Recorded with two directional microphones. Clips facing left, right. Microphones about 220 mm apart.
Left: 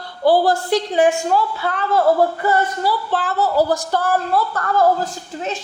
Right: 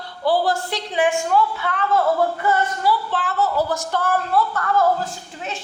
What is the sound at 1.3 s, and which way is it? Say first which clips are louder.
A woman's voice: left 1 dB; 40° left (ahead or behind).